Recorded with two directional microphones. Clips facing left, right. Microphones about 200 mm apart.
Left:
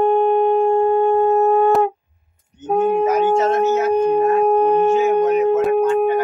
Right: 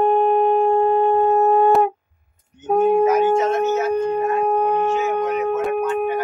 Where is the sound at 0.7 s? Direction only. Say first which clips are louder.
Left 1 dB; 25° left (ahead or behind).